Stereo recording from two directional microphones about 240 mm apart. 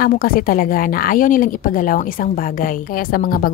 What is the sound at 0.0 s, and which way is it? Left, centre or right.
A woman's voice, left.